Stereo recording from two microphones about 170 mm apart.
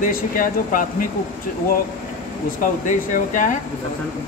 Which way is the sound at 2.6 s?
50° left (ahead or behind).